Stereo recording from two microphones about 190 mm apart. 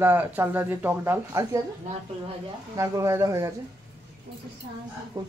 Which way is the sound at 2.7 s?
15° right (ahead or behind).